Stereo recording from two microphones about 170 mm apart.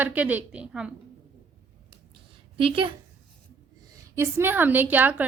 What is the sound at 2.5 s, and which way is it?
Speech, 30° right (ahead or behind).